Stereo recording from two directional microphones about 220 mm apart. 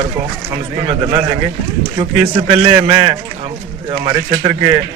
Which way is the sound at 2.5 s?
20° right (ahead or behind).